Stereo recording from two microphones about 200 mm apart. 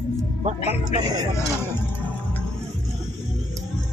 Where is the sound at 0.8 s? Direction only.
20° right (ahead or behind).